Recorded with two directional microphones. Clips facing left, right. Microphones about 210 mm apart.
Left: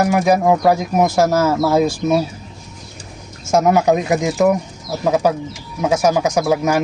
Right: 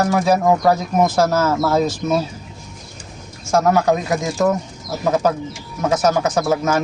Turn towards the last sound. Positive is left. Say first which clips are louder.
# left 2 dB
turn(degrees=10)  # may be behind; listen again after turning